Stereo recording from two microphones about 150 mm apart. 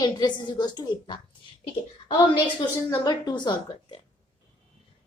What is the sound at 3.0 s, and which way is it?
Speech, 30° left (ahead or behind).